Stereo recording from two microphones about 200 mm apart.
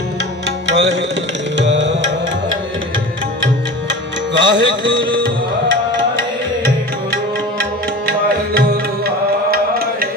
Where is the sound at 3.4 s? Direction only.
65° right (ahead or behind).